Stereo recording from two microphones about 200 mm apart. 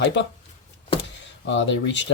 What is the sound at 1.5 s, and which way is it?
Speech, 65° left (ahead or behind).